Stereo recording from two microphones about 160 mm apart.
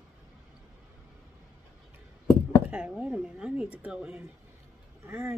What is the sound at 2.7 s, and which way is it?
Speech, 5° right (ahead or behind).